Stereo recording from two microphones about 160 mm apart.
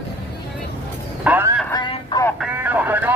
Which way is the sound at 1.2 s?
10° right (ahead or behind).